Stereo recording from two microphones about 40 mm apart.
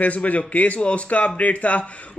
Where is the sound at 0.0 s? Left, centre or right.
Left.